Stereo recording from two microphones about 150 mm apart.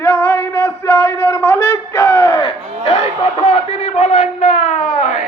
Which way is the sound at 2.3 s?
35° left (ahead or behind).